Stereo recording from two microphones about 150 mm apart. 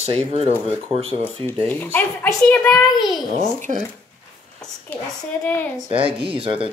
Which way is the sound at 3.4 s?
55° right (ahead or behind).